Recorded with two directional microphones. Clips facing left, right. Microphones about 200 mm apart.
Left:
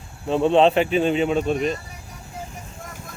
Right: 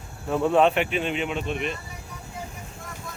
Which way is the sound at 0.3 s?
25° left (ahead or behind).